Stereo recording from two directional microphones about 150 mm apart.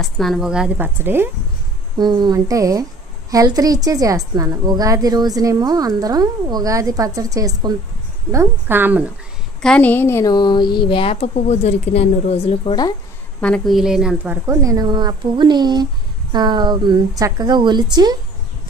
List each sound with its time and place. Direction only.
0.0 s a woman's voice: centre (ahead or behind); by 1.3 s 15° right (ahead or behind)
2.0 s a child's voice: 30° right (ahead or behind); by 9.1 s 10° right (ahead or behind)
9.6 s a woman's voice: 10° left (ahead or behind)
10.3 s a woman's voice: 30° left (ahead or behind)
13.4 s a woman's voice: 5° left (ahead or behind)
14.5 s a child's voice: 20° right (ahead or behind)